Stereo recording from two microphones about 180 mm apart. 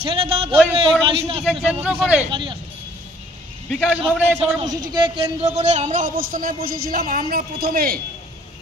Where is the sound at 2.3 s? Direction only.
25° right (ahead or behind).